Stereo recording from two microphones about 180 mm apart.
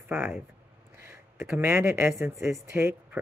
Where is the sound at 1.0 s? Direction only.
15° right (ahead or behind).